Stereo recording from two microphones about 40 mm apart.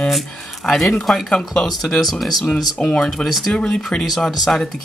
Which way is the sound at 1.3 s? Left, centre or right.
Centre.